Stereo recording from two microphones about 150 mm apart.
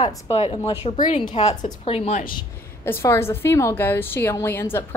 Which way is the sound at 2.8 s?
15° left (ahead or behind).